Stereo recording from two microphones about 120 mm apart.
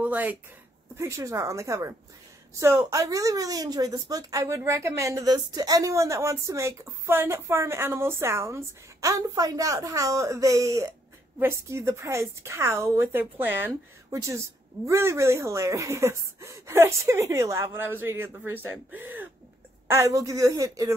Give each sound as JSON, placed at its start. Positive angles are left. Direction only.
{"t": 0.0, "sound": "speech", "side_deg": -15}
{"t": 0.9, "sound": "a woman's voice", "side_deg": -25}
{"t": 19.9, "sound": "a woman's voice", "side_deg": -25}